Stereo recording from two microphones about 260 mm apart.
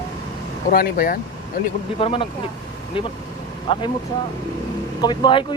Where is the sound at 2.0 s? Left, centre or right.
Left.